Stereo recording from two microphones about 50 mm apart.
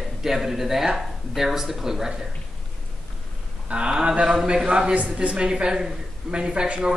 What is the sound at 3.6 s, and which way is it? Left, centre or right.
A man's voice, right.